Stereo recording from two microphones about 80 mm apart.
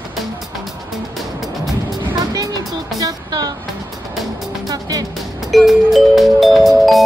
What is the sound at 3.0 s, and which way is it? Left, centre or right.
Music, right.